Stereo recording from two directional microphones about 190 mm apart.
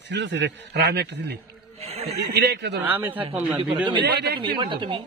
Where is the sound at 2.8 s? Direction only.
10° right (ahead or behind).